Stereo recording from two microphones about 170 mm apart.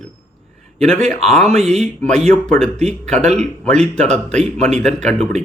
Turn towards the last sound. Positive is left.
turn(degrees=5)  # may be behind; listen again after turning